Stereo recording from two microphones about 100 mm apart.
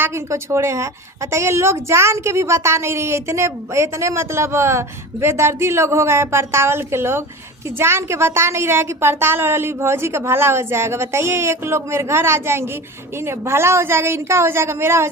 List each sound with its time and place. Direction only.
0.0 s a woman's voice: 25° right (ahead or behind)